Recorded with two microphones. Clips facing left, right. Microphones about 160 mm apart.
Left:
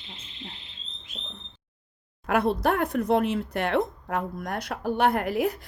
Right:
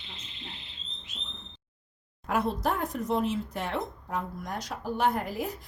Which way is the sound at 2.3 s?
65° left (ahead or behind).